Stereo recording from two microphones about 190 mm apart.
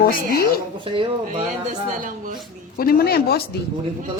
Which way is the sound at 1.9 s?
45° right (ahead or behind).